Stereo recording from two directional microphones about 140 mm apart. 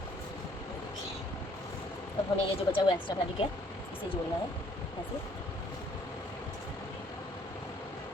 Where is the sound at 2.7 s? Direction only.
40° left (ahead or behind).